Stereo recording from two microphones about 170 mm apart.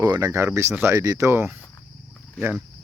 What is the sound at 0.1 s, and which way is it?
Speech, 20° right (ahead or behind).